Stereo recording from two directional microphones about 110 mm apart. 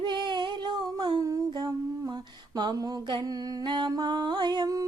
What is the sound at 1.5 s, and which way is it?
Humming, 40° right (ahead or behind).